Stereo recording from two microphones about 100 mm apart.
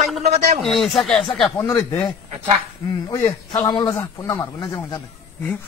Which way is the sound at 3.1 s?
40° left (ahead or behind).